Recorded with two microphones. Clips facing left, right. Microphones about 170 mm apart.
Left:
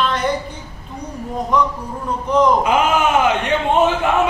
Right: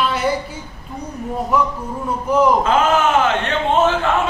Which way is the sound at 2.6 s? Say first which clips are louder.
Even; 15° left (ahead or behind).